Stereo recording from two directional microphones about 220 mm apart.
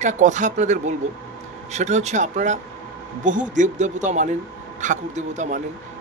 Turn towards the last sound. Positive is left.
turn(degrees=-35)  # may be behind; listen again after turning